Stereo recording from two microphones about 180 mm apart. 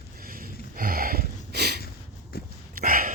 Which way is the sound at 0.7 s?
55° right (ahead or behind).